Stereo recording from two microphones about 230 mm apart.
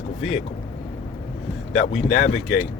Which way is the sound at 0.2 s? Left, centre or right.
Left.